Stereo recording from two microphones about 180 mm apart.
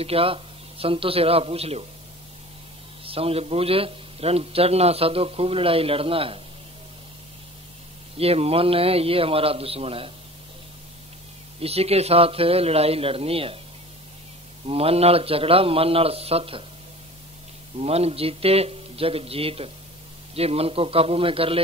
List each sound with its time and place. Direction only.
0.0 s a man's voice: 30° right (ahead or behind)
3.1 s a man's voice: 35° right (ahead or behind)
8.2 s a man's voice: 35° right (ahead or behind)
11.6 s a man's voice: 35° right (ahead or behind)
14.7 s a man's voice: 35° right (ahead or behind)
17.7 s a man's voice: 35° right (ahead or behind)